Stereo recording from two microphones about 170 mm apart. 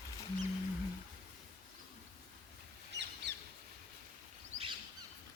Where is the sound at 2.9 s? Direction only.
90° right.